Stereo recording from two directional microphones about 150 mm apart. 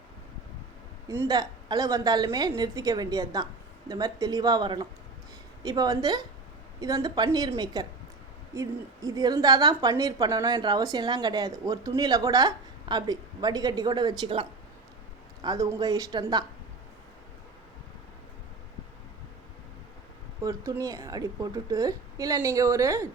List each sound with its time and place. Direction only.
1.0 s speech: 20° right (ahead or behind)
20.4 s speech: 20° right (ahead or behind)